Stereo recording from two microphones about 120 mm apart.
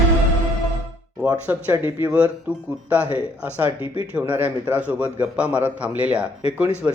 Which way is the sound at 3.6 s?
55° left (ahead or behind).